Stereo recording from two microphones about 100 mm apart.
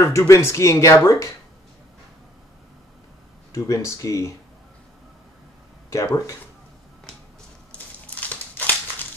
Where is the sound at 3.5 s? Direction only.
35° left (ahead or behind).